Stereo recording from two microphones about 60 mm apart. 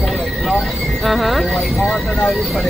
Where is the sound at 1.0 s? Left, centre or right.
Centre.